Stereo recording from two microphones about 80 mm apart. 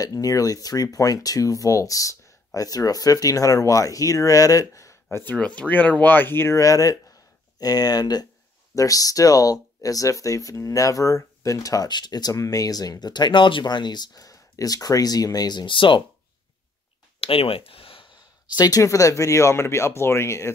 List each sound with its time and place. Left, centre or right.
0.0 s speech: left
5.1 s speech: left
6.6 s speech: left
11.9 s speech: left
17.9 s speech: left